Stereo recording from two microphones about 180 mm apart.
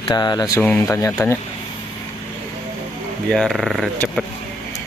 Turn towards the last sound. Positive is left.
turn(degrees=0)  # may be behind; listen again after turning